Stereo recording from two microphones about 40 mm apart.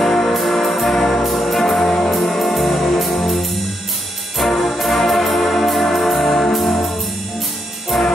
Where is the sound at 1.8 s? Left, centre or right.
Centre.